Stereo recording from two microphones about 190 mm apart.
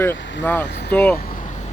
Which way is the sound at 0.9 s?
10° left (ahead or behind).